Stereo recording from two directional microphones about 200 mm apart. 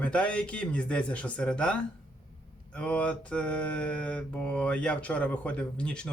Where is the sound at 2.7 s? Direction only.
5° left (ahead or behind).